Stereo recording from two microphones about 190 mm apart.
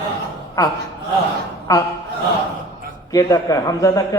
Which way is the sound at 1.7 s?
20° left (ahead or behind).